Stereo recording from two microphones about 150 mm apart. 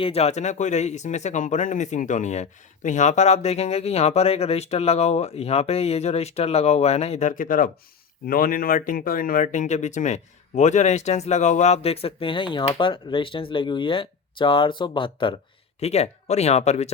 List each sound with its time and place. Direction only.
0.0 s speech: 45° left (ahead or behind)
15.8 s speech: 45° left (ahead or behind)